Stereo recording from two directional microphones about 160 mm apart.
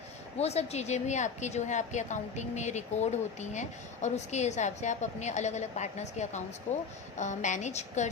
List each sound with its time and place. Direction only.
0.3 s a woman's voice: 40° left (ahead or behind)